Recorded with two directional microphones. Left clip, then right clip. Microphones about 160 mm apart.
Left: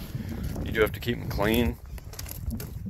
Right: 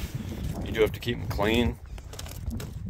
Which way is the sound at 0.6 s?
25° right (ahead or behind).